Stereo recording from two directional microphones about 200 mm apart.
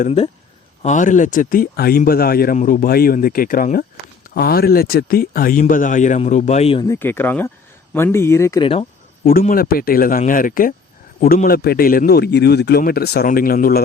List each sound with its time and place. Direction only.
0.0 s speech: 30° left (ahead or behind)
6.8 s speech: 15° left (ahead or behind)
9.4 s speech: 45° left (ahead or behind)